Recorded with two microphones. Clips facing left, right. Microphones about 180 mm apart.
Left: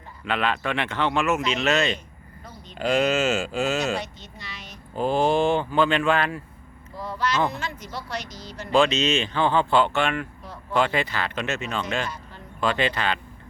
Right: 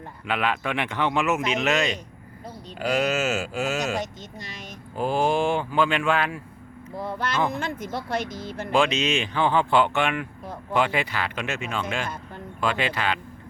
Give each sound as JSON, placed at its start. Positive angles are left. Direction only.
{"t": 0.3, "sound": "speech", "side_deg": -10}
{"t": 3.9, "sound": "speech", "side_deg": -45}
{"t": 4.9, "sound": "speech", "side_deg": -10}
{"t": 6.9, "sound": "speech", "side_deg": -55}
{"t": 8.7, "sound": "speech", "side_deg": -10}
{"t": 10.4, "sound": "a sound", "side_deg": -50}
{"t": 10.8, "sound": "speech", "side_deg": -10}
{"t": 12.0, "sound": "a sound", "side_deg": -55}
{"t": 12.5, "sound": "speech", "side_deg": -10}